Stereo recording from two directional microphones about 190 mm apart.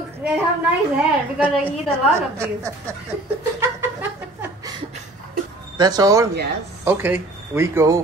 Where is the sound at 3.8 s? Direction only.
10° right (ahead or behind).